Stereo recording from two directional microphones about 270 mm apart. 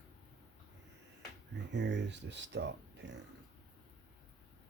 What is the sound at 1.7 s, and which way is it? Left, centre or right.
Speech, right.